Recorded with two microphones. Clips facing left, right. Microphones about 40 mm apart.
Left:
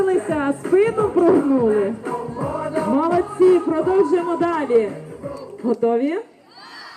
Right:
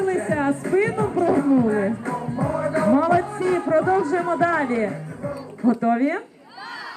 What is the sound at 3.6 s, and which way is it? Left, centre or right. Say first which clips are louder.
Speech: left 2 dB; centre.